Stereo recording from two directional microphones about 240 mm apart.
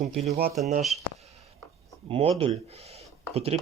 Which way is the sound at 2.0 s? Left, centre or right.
Right.